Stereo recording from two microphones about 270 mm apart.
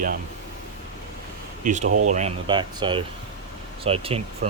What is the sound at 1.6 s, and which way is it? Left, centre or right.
Speech, right.